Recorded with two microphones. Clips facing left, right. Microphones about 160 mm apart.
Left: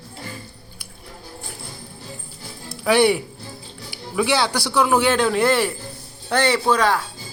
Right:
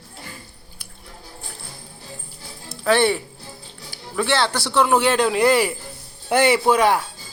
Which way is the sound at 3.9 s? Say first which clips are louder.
Left 1 dB; 10° left (ahead or behind).